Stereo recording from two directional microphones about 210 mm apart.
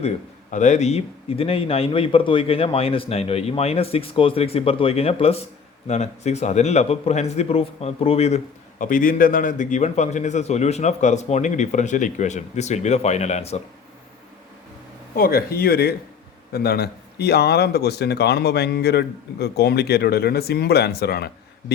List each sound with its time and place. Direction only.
0.5 s a man's voice: 35° left (ahead or behind)
8.8 s a man's voice: 40° left (ahead or behind)
15.1 s speech: 45° left (ahead or behind)